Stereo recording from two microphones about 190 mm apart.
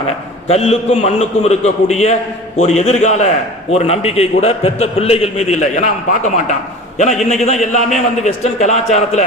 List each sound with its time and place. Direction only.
0.4 s a man's voice: 35° left (ahead or behind)